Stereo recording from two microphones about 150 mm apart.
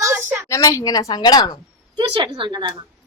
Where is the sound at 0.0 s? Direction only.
15° right (ahead or behind).